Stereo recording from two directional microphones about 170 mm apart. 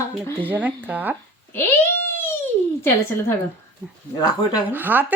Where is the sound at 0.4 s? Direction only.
10° right (ahead or behind).